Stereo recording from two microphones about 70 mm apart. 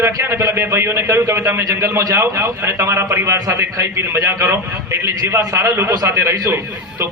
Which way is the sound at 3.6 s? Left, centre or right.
Right.